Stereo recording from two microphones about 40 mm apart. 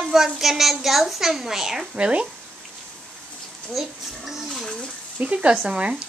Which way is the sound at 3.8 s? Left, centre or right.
Centre.